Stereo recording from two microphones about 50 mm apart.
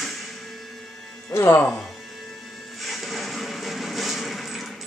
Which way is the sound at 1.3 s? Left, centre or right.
Left.